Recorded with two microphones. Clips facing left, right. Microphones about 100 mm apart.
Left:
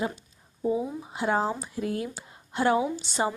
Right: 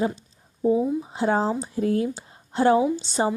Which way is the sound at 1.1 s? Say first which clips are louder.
Right 2 dB; 30° right (ahead or behind).